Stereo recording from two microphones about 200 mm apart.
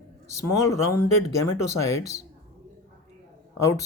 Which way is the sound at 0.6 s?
15° left (ahead or behind).